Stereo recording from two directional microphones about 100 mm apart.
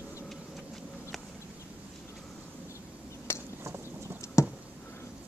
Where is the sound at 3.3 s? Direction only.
25° left (ahead or behind).